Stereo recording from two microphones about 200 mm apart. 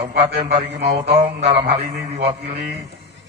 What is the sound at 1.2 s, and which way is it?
Speech, 35° right (ahead or behind).